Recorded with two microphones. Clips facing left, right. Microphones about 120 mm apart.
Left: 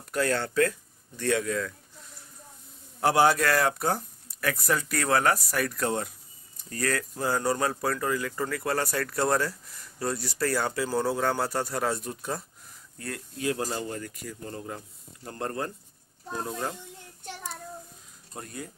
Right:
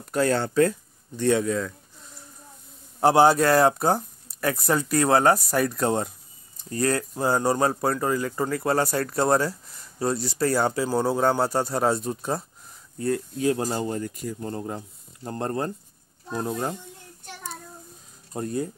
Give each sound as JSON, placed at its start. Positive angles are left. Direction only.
{"t": 0.1, "sound": "speech", "side_deg": -30}
{"t": 3.0, "sound": "speech", "side_deg": -30}
{"t": 18.3, "sound": "speech", "side_deg": -30}